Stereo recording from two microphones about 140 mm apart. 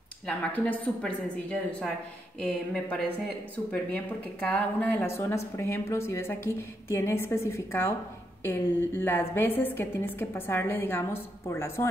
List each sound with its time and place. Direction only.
0.7 s a woman's voice: 10° left (ahead or behind)